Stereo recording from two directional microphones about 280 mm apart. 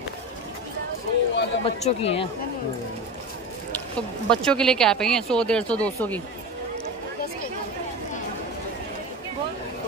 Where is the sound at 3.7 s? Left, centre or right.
Centre.